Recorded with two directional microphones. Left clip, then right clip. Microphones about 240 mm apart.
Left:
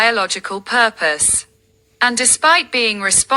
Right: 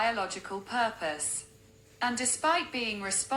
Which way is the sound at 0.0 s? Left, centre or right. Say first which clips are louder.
Left 14 dB; left.